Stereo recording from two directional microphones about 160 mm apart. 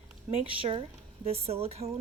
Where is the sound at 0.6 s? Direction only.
35° right (ahead or behind).